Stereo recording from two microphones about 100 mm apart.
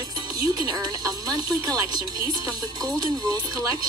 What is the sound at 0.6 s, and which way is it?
Speech, 40° right (ahead or behind).